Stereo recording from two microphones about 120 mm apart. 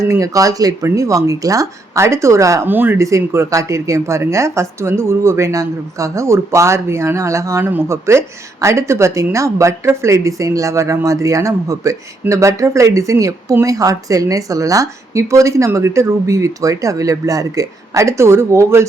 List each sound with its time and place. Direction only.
0.0 s a woman's voice: 25° right (ahead or behind)